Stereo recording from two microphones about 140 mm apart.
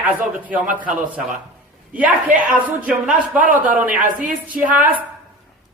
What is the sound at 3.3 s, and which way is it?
Speech, 10° right (ahead or behind).